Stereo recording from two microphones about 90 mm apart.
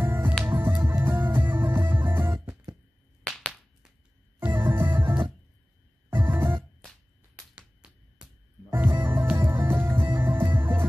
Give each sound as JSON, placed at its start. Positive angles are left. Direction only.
{"t": 0.0, "sound": "music", "side_deg": -25}
{"t": 3.3, "sound": "a sound", "side_deg": 0}
{"t": 4.4, "sound": "music", "side_deg": -25}
{"t": 7.5, "sound": "finger snapping", "side_deg": -10}
{"t": 8.6, "sound": "music", "side_deg": -25}